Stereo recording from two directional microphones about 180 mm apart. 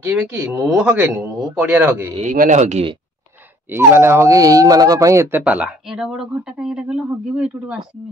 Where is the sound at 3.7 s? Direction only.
15° right (ahead or behind).